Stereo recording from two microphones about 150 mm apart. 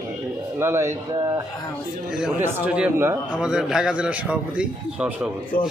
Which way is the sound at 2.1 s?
10° right (ahead or behind).